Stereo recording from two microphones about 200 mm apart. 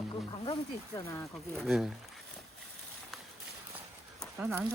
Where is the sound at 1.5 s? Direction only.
Centre (ahead or behind).